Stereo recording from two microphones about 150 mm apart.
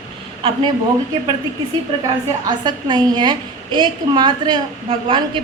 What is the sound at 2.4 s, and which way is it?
A woman's voice, 30° right (ahead or behind).